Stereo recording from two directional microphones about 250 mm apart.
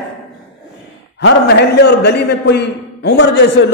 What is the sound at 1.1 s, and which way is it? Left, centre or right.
A man's voice, left.